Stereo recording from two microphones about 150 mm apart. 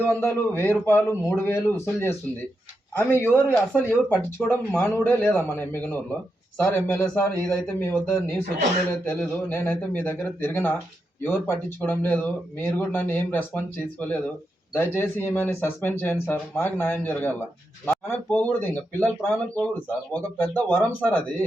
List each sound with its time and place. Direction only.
0.1 s speech: 15° left (ahead or behind)
3.2 s speech: 15° left (ahead or behind)
14.8 s speech: 15° left (ahead or behind)